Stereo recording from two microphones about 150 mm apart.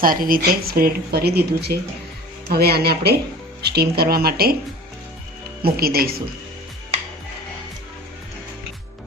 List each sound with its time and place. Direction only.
0.0 s speech: 70° right (ahead or behind); by 4.5 s 90° right
5.6 s speech: 85° right